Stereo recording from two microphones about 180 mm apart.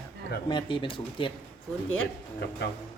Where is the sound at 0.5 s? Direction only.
25° left (ahead or behind).